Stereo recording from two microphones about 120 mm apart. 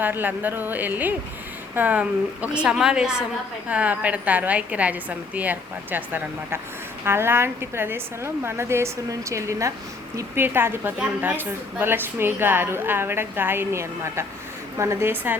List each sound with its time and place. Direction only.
0.0 s a woman's voice: 15° right (ahead or behind)